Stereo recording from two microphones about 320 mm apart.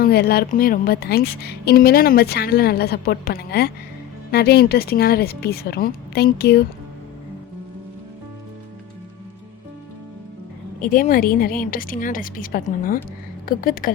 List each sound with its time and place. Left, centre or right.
0.0 s a woman's voice: left
10.8 s a woman's voice: left